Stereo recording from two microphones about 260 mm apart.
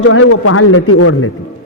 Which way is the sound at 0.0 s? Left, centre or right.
Left.